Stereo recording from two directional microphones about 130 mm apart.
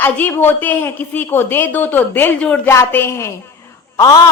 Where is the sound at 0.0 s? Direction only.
15° left (ahead or behind).